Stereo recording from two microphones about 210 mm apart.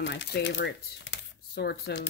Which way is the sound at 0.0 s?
60° left (ahead or behind).